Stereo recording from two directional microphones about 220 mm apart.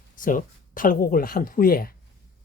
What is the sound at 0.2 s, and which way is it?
Speech, 40° left (ahead or behind).